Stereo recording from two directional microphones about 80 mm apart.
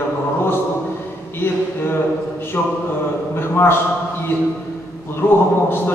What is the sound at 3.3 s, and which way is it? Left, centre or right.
Speech, left.